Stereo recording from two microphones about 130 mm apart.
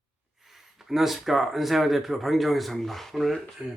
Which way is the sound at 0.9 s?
Centre (ahead or behind).